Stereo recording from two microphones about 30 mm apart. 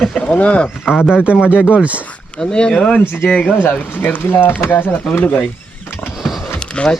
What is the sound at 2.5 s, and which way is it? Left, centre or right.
Speech, left.